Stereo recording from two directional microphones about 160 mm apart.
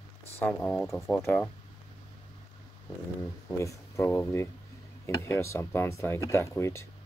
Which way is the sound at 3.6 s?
20° left (ahead or behind).